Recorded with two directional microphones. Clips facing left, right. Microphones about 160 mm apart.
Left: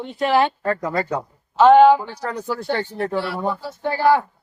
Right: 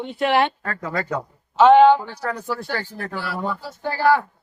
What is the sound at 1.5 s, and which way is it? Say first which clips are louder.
Speech: left 1 dB; centre (ahead or behind).